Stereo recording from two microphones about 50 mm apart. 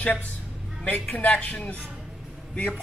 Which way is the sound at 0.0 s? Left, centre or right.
Left.